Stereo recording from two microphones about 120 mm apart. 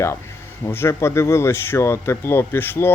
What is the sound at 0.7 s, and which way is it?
A man's voice, 20° left (ahead or behind).